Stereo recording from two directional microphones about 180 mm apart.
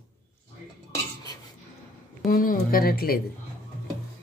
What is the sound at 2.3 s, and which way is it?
Speech, 50° left (ahead or behind).